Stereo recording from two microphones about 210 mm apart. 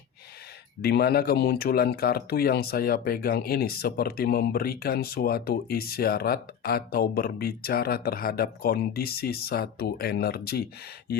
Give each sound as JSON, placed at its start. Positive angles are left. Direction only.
{"t": 0.8, "sound": "speech", "side_deg": 50}